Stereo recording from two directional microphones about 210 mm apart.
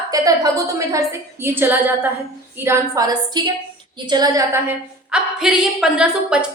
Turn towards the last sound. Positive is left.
turn(degrees=-5)  # may be behind; listen again after turning